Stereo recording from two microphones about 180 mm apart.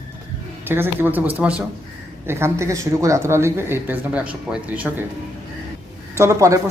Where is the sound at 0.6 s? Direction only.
10° right (ahead or behind).